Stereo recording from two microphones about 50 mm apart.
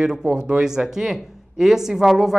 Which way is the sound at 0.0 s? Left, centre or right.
Centre.